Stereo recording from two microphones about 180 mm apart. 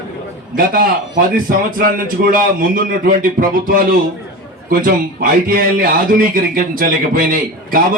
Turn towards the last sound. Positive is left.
turn(degrees=-50)  # may be behind; listen again after turning